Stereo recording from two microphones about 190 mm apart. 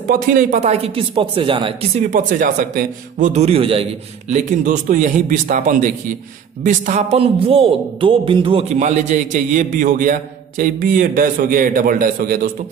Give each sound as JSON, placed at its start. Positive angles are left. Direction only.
{"t": 0.1, "sound": "speech", "side_deg": -50}
{"t": 4.3, "sound": "a man's voice", "side_deg": -40}